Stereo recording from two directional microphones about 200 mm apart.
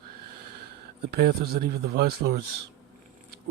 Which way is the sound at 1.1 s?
50° right (ahead or behind).